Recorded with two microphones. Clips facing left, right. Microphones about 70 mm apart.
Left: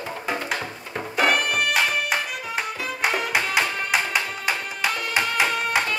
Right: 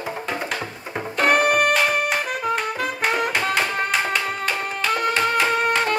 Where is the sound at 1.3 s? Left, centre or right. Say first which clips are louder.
Right 7 dB; right.